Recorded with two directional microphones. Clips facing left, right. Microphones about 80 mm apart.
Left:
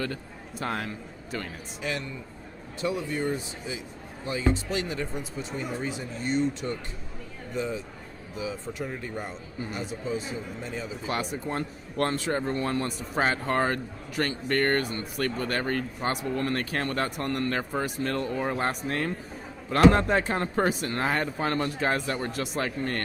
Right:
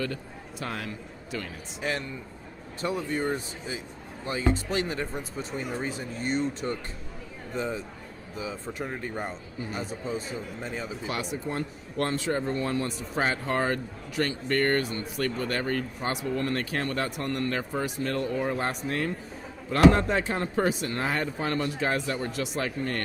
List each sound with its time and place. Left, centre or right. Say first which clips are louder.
0.6 s a man's voice: left 3 dB; left
1.8 s speech: right 1 dB; right
9.2 s speech: right 1 dB; right
11.1 s speech: left 2 dB; left